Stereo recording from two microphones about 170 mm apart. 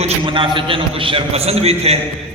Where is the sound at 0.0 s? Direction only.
30° right (ahead or behind).